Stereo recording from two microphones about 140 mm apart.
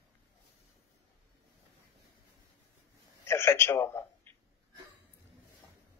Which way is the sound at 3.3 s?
15° left (ahead or behind).